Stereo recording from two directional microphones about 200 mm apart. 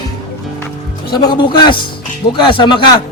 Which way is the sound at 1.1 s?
20° left (ahead or behind).